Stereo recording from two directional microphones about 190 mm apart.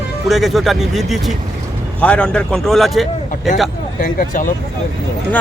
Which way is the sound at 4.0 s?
45° left (ahead or behind).